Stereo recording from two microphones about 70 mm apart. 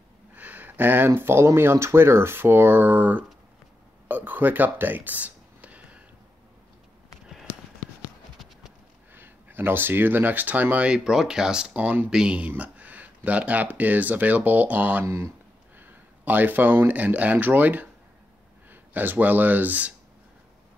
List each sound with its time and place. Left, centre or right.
0.3 s speech: right
4.1 s a sound: right
9.1 s speech: right
11.1 s speech: centre; by 15.0 s right
15.0 s speech: right
15.8 s speech: right